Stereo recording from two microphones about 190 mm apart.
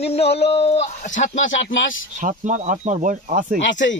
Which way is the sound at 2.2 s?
40° right (ahead or behind).